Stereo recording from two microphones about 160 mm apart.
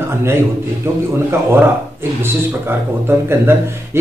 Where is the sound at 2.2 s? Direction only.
15° right (ahead or behind).